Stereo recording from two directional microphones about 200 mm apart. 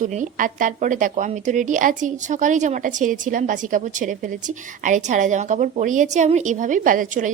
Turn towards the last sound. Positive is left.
turn(degrees=-40)  # may be behind; listen again after turning